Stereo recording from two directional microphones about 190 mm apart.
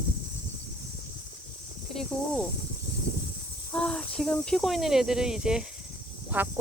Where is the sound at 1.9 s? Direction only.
5° left (ahead or behind).